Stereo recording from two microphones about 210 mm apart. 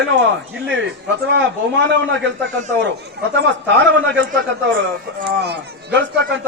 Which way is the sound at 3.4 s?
60° right (ahead or behind).